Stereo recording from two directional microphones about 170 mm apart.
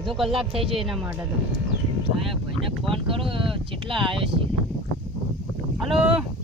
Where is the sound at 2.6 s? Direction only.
30° right (ahead or behind).